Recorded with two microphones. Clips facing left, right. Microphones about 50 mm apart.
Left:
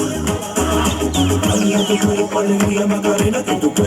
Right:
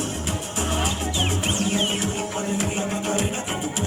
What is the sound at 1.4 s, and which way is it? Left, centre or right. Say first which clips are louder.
Music: left 8 dB; left.